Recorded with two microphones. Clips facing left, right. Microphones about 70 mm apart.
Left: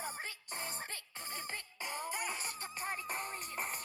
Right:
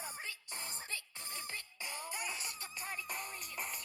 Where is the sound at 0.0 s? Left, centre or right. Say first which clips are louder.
Left 3 dB; left.